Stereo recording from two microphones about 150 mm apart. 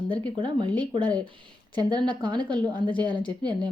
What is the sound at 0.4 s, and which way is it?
Speech, 35° right (ahead or behind).